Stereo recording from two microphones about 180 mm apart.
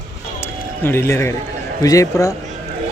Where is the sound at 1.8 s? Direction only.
20° left (ahead or behind).